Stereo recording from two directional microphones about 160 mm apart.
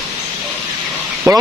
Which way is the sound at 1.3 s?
20° right (ahead or behind).